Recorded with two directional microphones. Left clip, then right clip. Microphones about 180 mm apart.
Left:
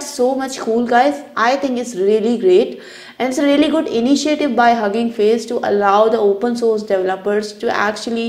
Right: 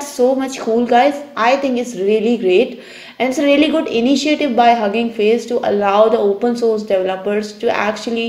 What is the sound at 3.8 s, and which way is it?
Speech, 50° left (ahead or behind).